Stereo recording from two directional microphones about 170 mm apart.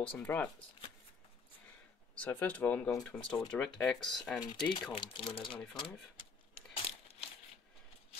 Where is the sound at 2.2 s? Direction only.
10° left (ahead or behind).